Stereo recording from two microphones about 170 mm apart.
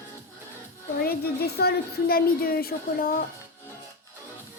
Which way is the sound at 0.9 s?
65° left (ahead or behind).